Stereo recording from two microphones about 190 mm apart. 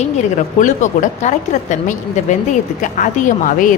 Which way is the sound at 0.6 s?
40° left (ahead or behind).